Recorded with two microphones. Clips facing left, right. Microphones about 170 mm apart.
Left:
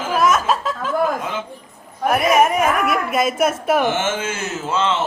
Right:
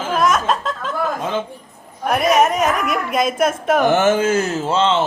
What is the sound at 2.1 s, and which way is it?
Speech, 5° left (ahead or behind).